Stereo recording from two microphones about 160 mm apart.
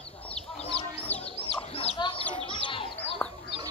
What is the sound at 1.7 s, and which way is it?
Chicken, 35° left (ahead or behind).